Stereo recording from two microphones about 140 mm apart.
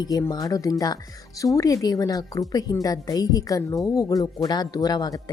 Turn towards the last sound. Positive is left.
turn(degrees=30)  # may be behind; listen again after turning